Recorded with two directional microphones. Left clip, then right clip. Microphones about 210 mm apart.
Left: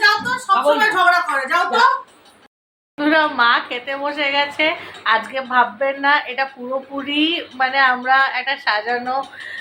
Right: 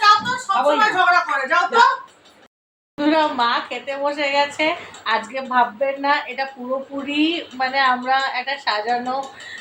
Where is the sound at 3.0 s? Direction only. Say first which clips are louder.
Left 2 dB; 5° right (ahead or behind).